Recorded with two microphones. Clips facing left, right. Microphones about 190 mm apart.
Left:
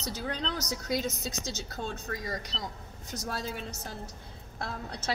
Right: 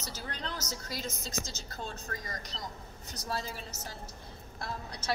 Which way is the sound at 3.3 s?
65° left (ahead or behind).